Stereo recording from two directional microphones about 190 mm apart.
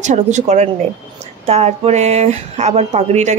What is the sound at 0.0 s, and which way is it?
Speech, 40° right (ahead or behind).